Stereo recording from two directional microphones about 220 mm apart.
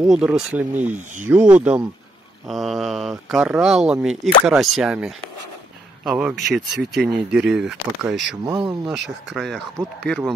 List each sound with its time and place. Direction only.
0.1 s speech: 5° right (ahead or behind)
0.9 s speech: 35° right (ahead or behind)
1.3 s speech: 5° right (ahead or behind)
8.5 s speech: 15° right (ahead or behind)
8.8 s speech: centre (ahead or behind)